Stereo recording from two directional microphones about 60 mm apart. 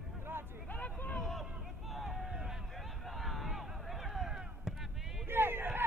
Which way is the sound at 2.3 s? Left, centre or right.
Centre.